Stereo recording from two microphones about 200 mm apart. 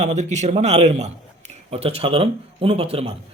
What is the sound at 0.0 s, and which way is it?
Speech, 35° right (ahead or behind).